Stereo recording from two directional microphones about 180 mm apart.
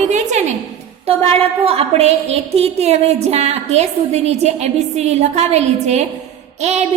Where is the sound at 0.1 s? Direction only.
40° right (ahead or behind).